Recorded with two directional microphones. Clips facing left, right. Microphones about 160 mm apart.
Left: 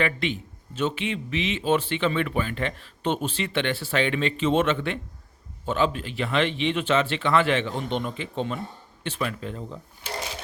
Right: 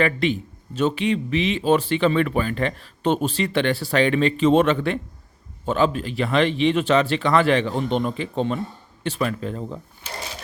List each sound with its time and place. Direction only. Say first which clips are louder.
0.0 s speech: right 5 dB; 40° right (ahead or behind)